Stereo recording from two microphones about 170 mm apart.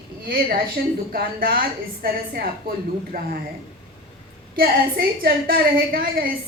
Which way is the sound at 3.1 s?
60° right (ahead or behind).